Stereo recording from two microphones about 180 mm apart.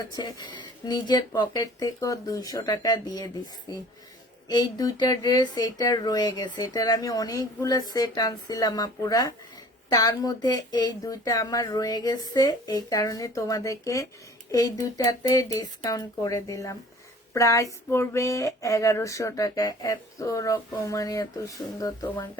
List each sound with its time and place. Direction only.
0.1 s speech: 25° left (ahead or behind)